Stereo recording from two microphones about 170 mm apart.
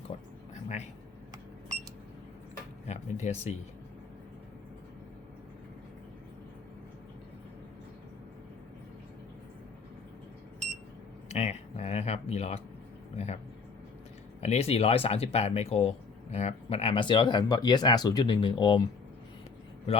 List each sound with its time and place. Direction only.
0.1 s a sound: 40° left (ahead or behind)
2.8 s speech: 40° left (ahead or behind)
11.3 s speech: 40° left (ahead or behind)
14.4 s speech: 40° left (ahead or behind)